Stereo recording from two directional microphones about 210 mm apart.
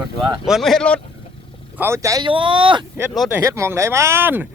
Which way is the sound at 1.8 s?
15° right (ahead or behind).